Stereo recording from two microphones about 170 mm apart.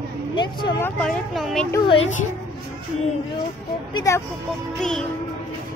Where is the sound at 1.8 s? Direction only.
30° left (ahead or behind).